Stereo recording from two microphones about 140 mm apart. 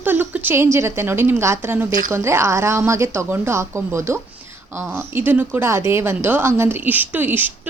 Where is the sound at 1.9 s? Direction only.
70° right (ahead or behind).